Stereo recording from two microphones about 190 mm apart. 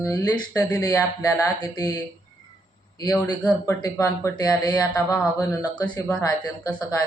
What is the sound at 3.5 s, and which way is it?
Speech, 20° left (ahead or behind).